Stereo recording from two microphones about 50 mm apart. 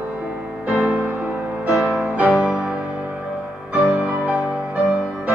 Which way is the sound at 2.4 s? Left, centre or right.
Centre.